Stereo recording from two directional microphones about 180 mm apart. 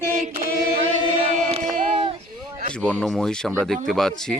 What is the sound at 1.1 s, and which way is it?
Chant, 35° right (ahead or behind).